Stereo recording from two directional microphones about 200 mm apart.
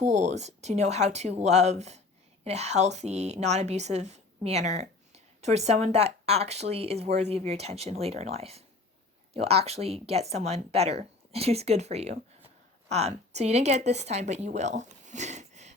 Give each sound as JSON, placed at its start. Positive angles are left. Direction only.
{"t": 0.0, "sound": "a woman's voice", "side_deg": -35}